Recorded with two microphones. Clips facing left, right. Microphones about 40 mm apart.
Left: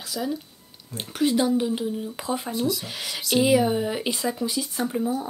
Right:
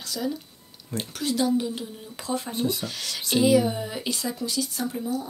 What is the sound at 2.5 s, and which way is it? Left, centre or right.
Speech, right.